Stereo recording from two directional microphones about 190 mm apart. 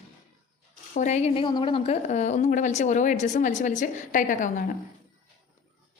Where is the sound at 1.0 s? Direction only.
40° left (ahead or behind).